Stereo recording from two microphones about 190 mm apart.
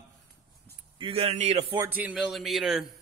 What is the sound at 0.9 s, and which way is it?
Speech, 30° right (ahead or behind).